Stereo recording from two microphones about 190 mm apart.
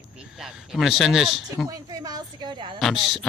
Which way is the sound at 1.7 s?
20° right (ahead or behind).